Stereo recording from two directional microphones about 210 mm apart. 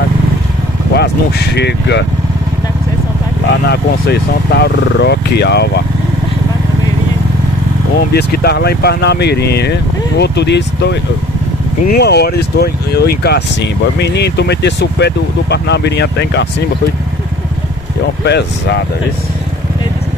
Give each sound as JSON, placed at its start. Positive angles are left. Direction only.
{"t": 0.9, "sound": "speech", "side_deg": 50}
{"t": 3.6, "sound": "speech", "side_deg": 50}
{"t": 8.1, "sound": "speech", "side_deg": 50}
{"t": 18.2, "sound": "speech", "side_deg": 55}